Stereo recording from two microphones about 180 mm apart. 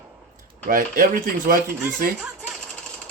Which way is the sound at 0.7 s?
50° right (ahead or behind).